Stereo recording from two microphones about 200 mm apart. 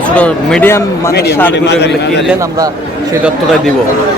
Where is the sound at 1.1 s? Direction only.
55° left (ahead or behind).